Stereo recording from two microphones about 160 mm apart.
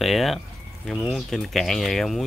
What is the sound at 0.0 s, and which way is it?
Speech, centre (ahead or behind).